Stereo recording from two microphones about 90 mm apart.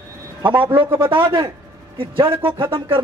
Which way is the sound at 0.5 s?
20° right (ahead or behind).